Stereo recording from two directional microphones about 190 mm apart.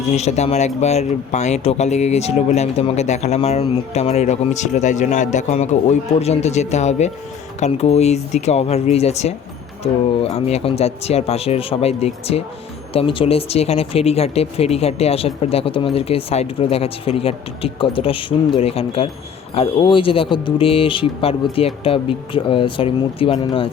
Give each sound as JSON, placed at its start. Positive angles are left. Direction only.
{"t": 0.0, "sound": "speech", "side_deg": 35}